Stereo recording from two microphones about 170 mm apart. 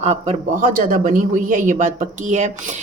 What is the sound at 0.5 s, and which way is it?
A woman's voice, 55° right (ahead or behind).